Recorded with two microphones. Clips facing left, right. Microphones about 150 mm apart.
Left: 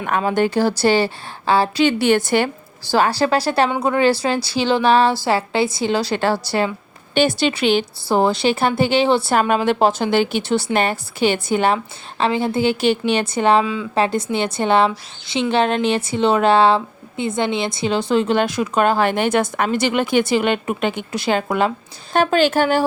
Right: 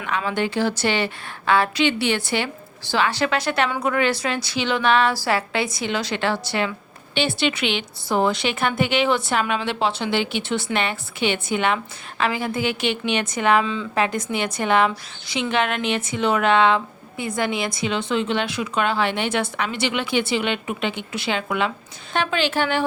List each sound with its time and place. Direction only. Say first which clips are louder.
0.0 s a woman's voice: left 6 dB; 40° left (ahead or behind)